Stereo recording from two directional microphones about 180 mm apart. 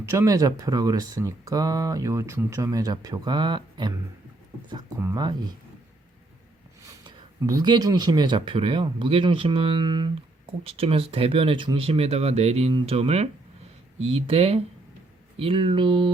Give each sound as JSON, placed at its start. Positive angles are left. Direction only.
{"t": 0.0, "sound": "speech", "side_deg": -15}
{"t": 7.0, "sound": "speech", "side_deg": -20}